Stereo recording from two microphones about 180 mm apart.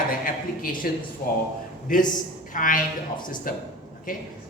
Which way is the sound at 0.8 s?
55° left (ahead or behind).